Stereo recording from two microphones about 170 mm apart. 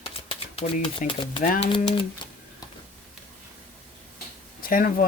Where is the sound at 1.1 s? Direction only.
30° left (ahead or behind).